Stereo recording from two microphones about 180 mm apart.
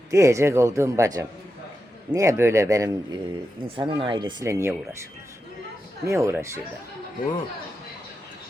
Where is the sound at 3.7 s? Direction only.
25° right (ahead or behind).